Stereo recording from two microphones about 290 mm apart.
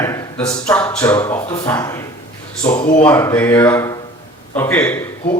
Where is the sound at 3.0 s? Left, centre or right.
Centre.